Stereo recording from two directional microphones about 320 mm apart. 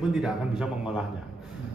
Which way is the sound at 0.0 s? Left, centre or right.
Centre.